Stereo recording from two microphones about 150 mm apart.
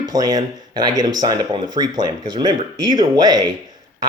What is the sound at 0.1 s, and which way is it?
Speech, 25° right (ahead or behind).